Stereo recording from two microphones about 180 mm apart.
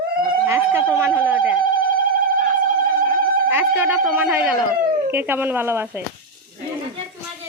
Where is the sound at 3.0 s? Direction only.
55° right (ahead or behind).